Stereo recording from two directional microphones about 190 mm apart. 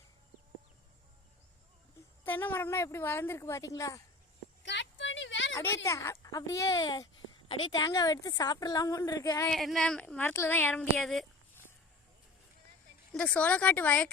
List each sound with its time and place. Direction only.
2.2 s speech: 10° left (ahead or behind)
4.6 s a sound: 70° left (ahead or behind)
5.5 s speech: 15° left (ahead or behind)
9.5 s speech: centre (ahead or behind)
13.1 s speech: 5° left (ahead or behind)